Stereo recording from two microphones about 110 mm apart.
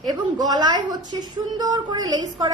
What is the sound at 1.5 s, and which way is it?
Speech, 40° right (ahead or behind).